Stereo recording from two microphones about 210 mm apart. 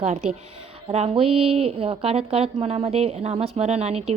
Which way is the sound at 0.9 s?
30° right (ahead or behind).